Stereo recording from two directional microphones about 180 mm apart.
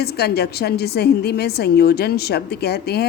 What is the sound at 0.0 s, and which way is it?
A woman's voice, 65° left (ahead or behind).